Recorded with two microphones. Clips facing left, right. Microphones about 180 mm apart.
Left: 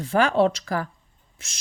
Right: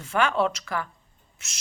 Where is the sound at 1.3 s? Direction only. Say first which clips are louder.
Left 1 dB; 30° left (ahead or behind).